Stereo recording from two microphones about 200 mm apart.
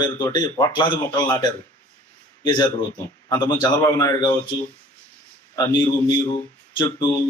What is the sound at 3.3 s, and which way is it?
A man's voice, 20° left (ahead or behind).